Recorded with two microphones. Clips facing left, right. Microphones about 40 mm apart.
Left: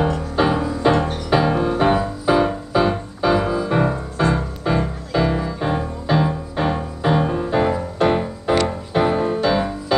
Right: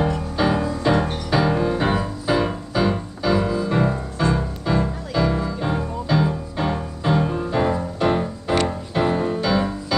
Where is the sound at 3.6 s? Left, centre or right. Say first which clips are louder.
Left 2 dB; centre.